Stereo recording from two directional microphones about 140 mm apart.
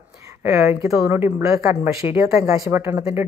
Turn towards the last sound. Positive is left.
turn(degrees=-20)  # may be behind; listen again after turning